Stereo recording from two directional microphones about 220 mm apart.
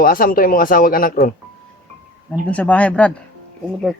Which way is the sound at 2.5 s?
5° left (ahead or behind).